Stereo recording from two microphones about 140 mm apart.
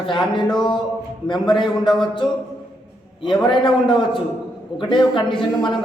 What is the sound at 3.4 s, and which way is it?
Speech, 35° left (ahead or behind).